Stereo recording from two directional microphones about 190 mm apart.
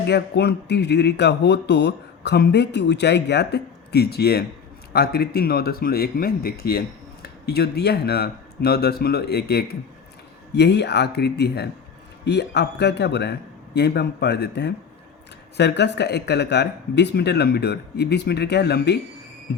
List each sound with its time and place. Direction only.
0.1 s speech: 60° left (ahead or behind)